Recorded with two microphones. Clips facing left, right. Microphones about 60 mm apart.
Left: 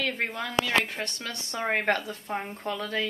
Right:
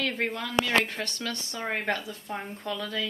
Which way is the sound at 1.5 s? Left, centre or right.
Left.